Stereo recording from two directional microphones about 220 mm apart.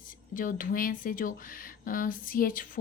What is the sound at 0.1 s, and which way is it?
A woman's voice, 40° left (ahead or behind).